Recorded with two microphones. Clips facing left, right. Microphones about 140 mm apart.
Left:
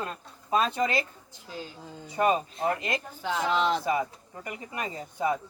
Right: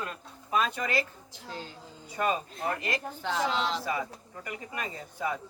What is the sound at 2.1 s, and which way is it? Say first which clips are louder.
Speech: left 5 dB; 25° left (ahead or behind).